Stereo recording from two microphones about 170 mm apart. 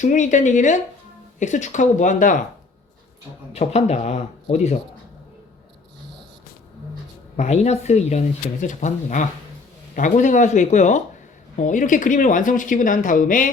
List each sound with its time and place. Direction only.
0.0 s speech: 45° left (ahead or behind)
3.5 s speech: 40° left (ahead or behind)
7.3 s speech: 40° left (ahead or behind)